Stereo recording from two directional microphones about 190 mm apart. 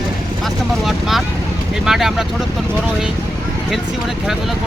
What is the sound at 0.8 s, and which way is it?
Vehicle, centre (ahead or behind).